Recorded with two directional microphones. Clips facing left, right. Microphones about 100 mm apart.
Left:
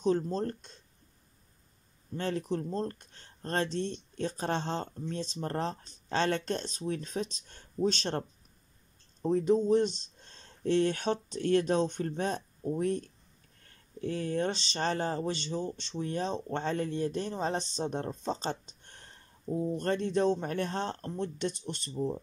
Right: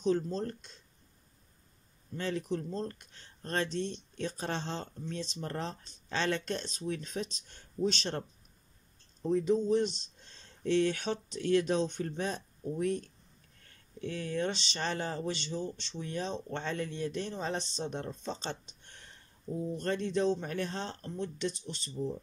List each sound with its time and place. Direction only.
0.0 s speech: 40° left (ahead or behind)
2.1 s speech: 45° left (ahead or behind)